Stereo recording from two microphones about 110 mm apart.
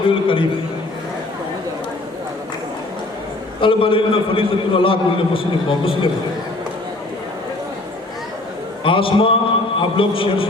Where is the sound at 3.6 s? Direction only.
50° left (ahead or behind).